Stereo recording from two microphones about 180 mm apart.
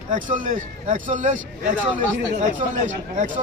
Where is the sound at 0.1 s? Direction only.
45° right (ahead or behind).